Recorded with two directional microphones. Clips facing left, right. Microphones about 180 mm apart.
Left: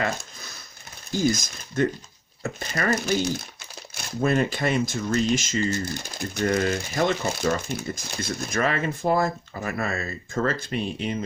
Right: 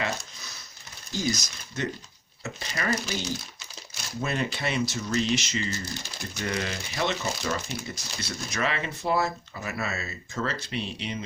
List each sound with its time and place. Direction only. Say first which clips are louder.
1.1 s speech: left 6 dB; 50° left (ahead or behind)